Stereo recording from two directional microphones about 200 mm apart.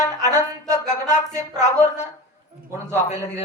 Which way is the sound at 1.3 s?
35° left (ahead or behind).